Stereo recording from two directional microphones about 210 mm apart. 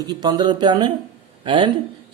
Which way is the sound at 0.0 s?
20° right (ahead or behind).